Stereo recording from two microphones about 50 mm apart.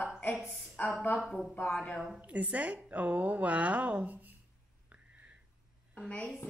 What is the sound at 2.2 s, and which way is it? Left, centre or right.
A woman's voice, right.